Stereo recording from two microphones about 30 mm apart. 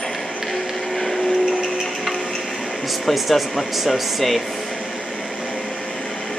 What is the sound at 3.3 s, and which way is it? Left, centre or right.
Speech, centre.